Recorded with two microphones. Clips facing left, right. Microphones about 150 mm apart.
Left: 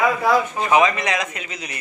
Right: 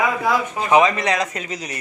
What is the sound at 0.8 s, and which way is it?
Speech, 35° right (ahead or behind).